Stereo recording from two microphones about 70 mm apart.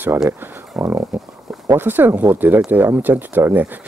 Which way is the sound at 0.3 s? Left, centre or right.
Right.